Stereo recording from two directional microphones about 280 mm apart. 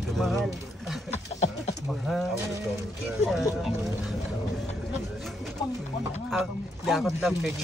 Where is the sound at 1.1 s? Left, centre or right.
Left.